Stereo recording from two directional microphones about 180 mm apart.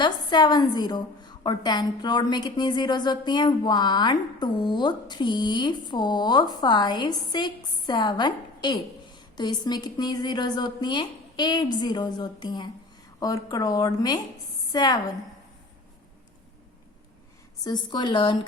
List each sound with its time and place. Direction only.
0.0 s a woman's voice: 25° left (ahead or behind)
17.6 s a woman's voice: 25° left (ahead or behind)